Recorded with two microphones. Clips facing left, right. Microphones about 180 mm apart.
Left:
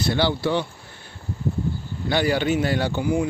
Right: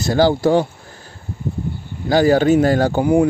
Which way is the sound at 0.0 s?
45° right (ahead or behind).